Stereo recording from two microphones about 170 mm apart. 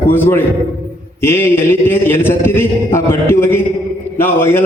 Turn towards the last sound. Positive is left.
turn(degrees=15)  # may be behind; listen again after turning